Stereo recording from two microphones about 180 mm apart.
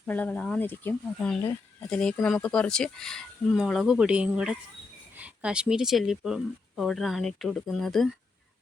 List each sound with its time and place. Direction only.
0.0 s speech: 10° left (ahead or behind)